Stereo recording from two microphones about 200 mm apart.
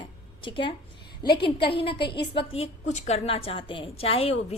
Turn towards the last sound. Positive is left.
turn(degrees=30)  # may be behind; listen again after turning